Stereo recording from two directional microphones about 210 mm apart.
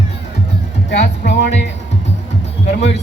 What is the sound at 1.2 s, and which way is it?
Speech, 50° left (ahead or behind).